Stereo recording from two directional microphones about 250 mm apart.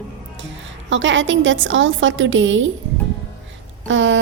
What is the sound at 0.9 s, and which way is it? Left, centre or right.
Speech, right.